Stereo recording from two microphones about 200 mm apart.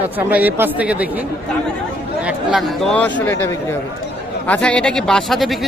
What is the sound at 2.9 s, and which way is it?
Speech, 5° left (ahead or behind).